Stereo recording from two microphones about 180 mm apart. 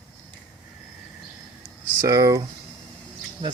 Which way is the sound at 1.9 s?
20° right (ahead or behind).